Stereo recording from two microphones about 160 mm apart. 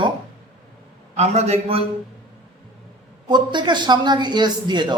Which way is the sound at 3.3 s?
30° right (ahead or behind).